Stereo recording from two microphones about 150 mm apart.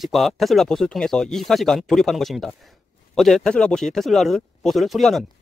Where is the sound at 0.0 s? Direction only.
Centre (ahead or behind).